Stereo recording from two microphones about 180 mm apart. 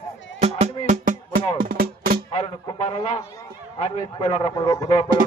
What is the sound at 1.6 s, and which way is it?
Music, 55° right (ahead or behind).